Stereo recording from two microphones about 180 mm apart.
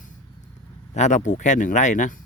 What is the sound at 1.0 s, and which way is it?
Speech, 40° left (ahead or behind).